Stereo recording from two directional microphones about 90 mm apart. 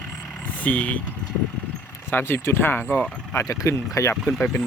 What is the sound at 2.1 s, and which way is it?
Speech, 25° left (ahead or behind).